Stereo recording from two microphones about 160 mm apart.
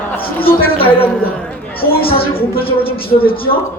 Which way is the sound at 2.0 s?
35° left (ahead or behind).